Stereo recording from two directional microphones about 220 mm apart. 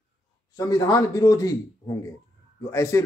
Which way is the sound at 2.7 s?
15° left (ahead or behind).